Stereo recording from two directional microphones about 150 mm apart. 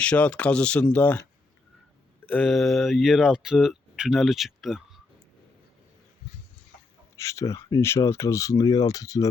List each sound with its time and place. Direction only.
0.0 s speech: 10° left (ahead or behind)
2.3 s speech: 5° left (ahead or behind)
7.2 s speech: 20° left (ahead or behind)